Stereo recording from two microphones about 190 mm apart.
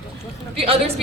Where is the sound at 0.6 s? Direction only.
30° right (ahead or behind).